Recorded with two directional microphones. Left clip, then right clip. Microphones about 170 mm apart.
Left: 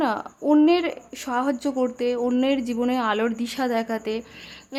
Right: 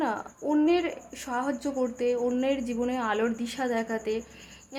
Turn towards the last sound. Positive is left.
turn(degrees=30)  # may be behind; listen again after turning